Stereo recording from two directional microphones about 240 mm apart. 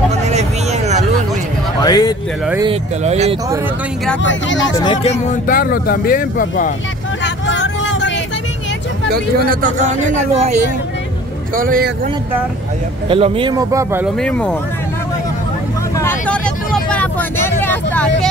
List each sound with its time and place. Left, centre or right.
0.3 s vehicle: right
1.8 s a man's voice: centre
2.6 s speech: right
4.2 s speech: left
4.7 s speech: centre
5.2 s speech: left
7.4 s vehicle: left
9.1 s speech: right
13.1 s speech: right
14.0 s speech: centre
16.0 s vehicle: centre